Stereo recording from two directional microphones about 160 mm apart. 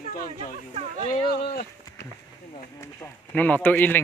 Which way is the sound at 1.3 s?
75° left (ahead or behind).